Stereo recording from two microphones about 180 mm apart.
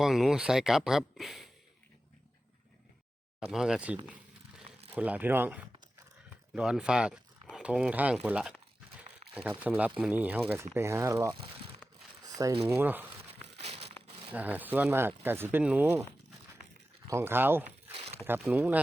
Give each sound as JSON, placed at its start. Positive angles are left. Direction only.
{"t": 0.0, "sound": "speech", "side_deg": 0}
{"t": 3.5, "sound": "speech", "side_deg": -5}
{"t": 12.2, "sound": "a sound", "side_deg": -20}
{"t": 12.6, "sound": "speech", "side_deg": -10}
{"t": 13.6, "sound": "crumpling", "side_deg": -35}
{"t": 14.3, "sound": "speech", "side_deg": -10}
{"t": 17.1, "sound": "speech", "side_deg": -15}